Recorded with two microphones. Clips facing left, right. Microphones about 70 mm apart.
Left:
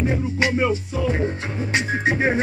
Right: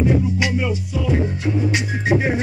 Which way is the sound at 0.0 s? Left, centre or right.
Left.